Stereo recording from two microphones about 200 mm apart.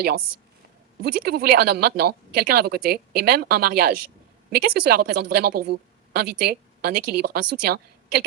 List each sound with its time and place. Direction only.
1.0 s speech: 50° right (ahead or behind)